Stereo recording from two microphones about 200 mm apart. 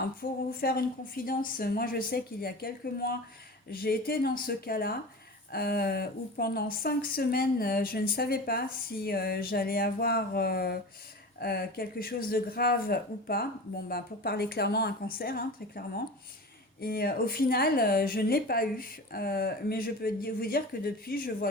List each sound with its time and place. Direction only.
0.2 s speech: 50° left (ahead or behind)
16.8 s speech: 50° left (ahead or behind)